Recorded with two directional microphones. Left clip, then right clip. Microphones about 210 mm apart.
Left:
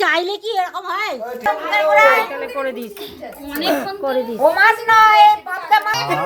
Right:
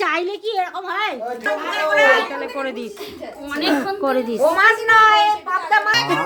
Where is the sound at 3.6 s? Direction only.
25° right (ahead or behind).